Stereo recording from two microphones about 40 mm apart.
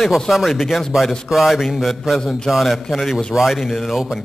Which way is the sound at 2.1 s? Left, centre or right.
Centre.